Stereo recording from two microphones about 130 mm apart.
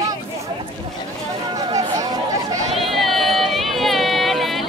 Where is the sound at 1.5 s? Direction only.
30° right (ahead or behind).